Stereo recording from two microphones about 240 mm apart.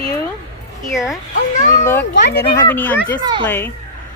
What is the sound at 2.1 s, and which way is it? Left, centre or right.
Speech, left.